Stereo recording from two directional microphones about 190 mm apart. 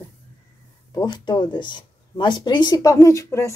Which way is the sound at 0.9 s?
25° left (ahead or behind).